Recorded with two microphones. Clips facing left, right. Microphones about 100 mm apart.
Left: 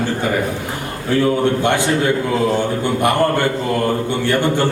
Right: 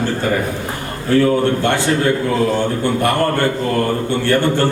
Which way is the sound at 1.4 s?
15° left (ahead or behind).